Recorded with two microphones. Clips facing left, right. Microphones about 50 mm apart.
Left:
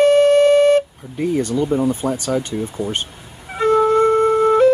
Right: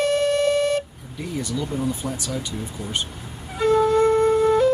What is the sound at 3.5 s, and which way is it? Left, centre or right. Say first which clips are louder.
Wind instrument: left 4 dB; left.